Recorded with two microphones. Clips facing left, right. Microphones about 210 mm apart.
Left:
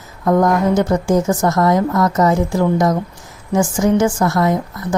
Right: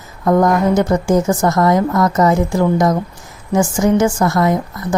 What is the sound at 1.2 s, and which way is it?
Speech, centre (ahead or behind).